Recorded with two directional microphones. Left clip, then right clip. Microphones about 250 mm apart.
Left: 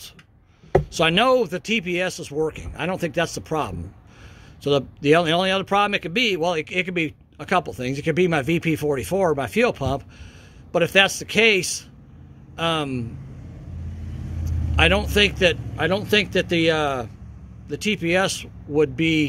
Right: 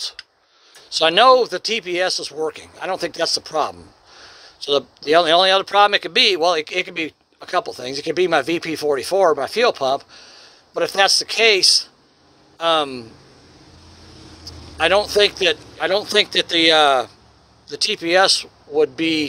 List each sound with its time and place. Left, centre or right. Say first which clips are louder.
0.9 s speech: right 7 dB; right
14.8 s speech: right 3 dB; right